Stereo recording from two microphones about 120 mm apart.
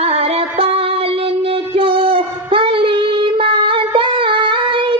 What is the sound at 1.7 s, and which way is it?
Child singing, 50° right (ahead or behind).